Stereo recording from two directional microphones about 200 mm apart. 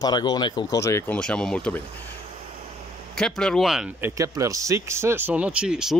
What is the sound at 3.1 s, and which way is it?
Speech, 5° left (ahead or behind).